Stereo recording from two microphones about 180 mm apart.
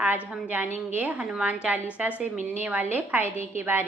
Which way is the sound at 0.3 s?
5° right (ahead or behind).